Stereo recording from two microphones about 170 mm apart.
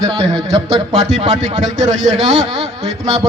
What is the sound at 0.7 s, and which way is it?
A man's voice, 40° right (ahead or behind).